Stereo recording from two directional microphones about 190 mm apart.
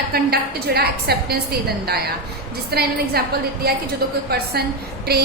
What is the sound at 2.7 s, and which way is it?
A woman's voice, 55° right (ahead or behind).